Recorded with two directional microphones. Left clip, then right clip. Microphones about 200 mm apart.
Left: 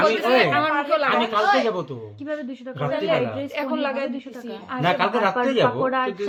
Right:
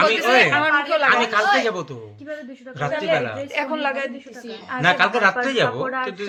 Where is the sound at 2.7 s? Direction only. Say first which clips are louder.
Left 2 dB; 35° left (ahead or behind).